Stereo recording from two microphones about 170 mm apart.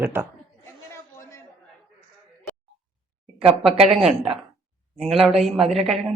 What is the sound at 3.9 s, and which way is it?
A woman's voice, 5° right (ahead or behind).